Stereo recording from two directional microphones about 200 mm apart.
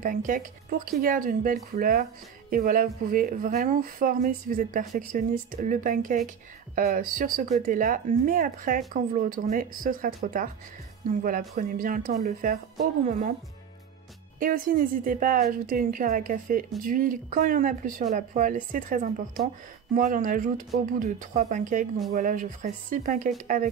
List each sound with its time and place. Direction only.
0.0 s speech: 40° right (ahead or behind)
14.4 s speech: 45° right (ahead or behind)